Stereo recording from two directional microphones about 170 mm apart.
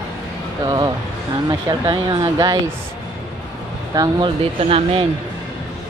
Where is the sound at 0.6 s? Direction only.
25° right (ahead or behind).